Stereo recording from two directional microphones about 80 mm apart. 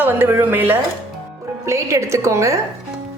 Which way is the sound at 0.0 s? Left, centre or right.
Right.